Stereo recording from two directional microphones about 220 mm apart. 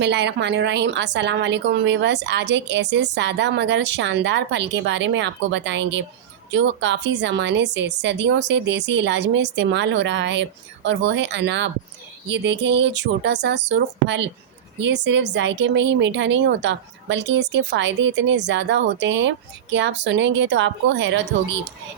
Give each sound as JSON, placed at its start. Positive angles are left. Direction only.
{"t": 0.0, "sound": "a woman's voice", "side_deg": -50}